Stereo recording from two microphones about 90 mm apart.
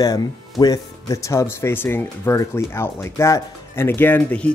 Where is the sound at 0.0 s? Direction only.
40° left (ahead or behind).